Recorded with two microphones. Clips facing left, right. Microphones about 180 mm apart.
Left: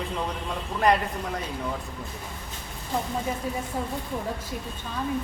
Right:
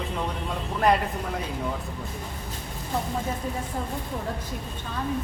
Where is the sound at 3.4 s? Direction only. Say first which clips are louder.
Left 1 dB; 10° left (ahead or behind).